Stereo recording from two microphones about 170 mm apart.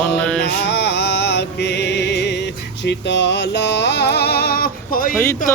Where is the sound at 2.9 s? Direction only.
90° left; by 5.1 s 55° left (ahead or behind).